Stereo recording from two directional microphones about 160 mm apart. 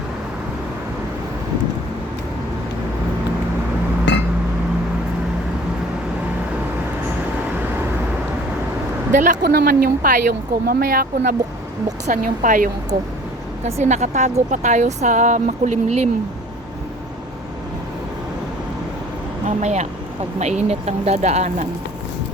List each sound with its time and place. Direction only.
4.1 s glass: 90° left
9.1 s a woman's voice: 55° right (ahead or behind)
9.4 s a woman's voice: 75° right (ahead or behind); by 12.7 s 60° right (ahead or behind)
13.7 s speech: 45° right (ahead or behind)
19.5 s speech: 45° right (ahead or behind)